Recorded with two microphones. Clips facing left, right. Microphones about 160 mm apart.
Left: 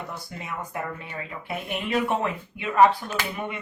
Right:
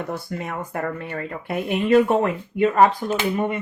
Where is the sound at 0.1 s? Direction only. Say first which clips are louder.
Right 7 dB; 55° right (ahead or behind).